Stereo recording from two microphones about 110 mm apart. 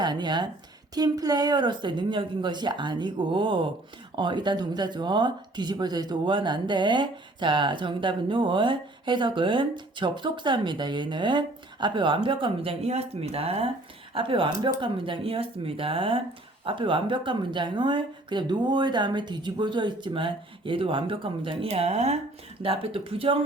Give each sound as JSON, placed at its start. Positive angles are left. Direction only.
{"t": 0.0, "sound": "speech", "side_deg": -40}
{"t": 21.7, "sound": "speech", "side_deg": -75}
{"t": 22.6, "sound": "speech", "side_deg": -60}